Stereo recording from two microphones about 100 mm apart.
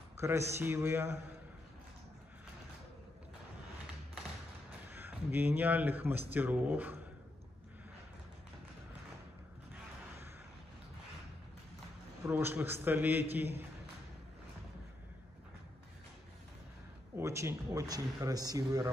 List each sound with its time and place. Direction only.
0.2 s a man's voice: 25° right (ahead or behind)
4.8 s speech: 20° right (ahead or behind)
12.2 s a man's voice: 25° right (ahead or behind)
17.2 s speech: 30° right (ahead or behind)